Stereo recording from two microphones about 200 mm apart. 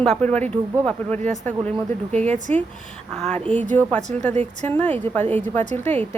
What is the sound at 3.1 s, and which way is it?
Speech, 5° left (ahead or behind).